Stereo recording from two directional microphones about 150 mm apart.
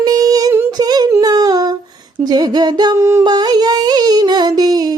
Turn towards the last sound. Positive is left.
turn(degrees=-25)  # may be behind; listen again after turning